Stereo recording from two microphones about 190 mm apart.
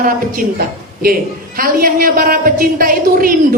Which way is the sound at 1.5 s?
50° right (ahead or behind).